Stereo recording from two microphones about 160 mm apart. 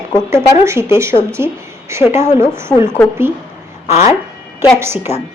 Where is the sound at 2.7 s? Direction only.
15° left (ahead or behind).